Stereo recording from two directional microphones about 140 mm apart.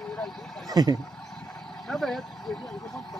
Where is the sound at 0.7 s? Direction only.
30° right (ahead or behind).